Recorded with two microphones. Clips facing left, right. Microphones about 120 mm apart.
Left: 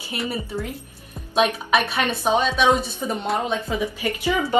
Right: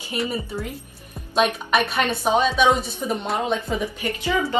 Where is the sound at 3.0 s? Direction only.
Centre (ahead or behind).